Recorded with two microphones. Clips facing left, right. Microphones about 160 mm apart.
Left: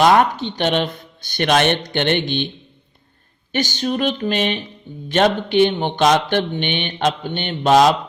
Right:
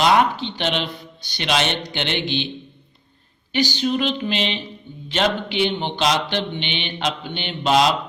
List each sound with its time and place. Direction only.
0.0 s speech: 50° left (ahead or behind)
3.5 s speech: 50° left (ahead or behind)